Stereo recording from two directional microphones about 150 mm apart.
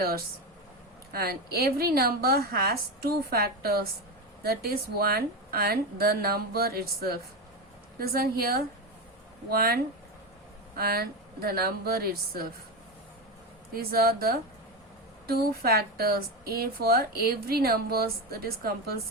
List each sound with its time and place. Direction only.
1.1 s a woman's voice: 90° right
13.7 s a woman's voice: 90° right